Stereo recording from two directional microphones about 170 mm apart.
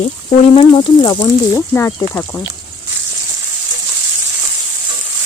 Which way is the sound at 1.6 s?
15° left (ahead or behind).